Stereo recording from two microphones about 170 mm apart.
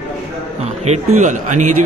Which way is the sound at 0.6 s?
40° right (ahead or behind).